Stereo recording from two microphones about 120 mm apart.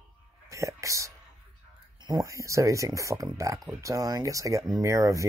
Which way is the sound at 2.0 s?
35° right (ahead or behind).